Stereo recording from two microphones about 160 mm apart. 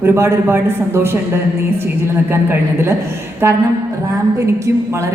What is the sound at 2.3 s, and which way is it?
A woman's voice, 15° right (ahead or behind).